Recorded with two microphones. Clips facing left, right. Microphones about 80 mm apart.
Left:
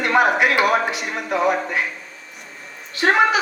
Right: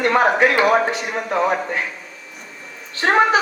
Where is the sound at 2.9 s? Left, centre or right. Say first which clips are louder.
Right 1 dB; right.